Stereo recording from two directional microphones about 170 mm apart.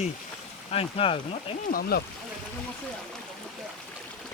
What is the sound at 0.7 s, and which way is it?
Speech, 35° left (ahead or behind).